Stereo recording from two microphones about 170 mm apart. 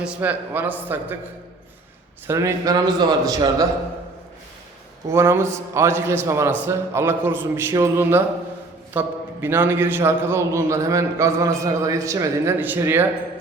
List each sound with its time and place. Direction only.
0.0 s a man's voice: 10° right (ahead or behind)
2.2 s a man's voice: 15° right (ahead or behind)
5.0 s a man's voice: 15° right (ahead or behind)